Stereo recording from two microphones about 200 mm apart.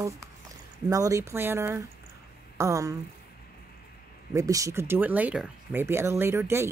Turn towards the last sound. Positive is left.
turn(degrees=-10)  # may be behind; listen again after turning